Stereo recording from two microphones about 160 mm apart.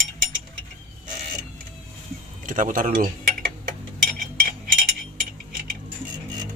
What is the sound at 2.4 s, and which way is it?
Speech, 55° right (ahead or behind).